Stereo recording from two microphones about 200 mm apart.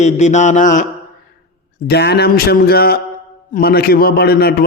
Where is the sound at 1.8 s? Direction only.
55° left (ahead or behind).